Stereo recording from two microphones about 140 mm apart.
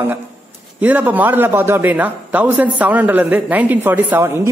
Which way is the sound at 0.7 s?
10° right (ahead or behind).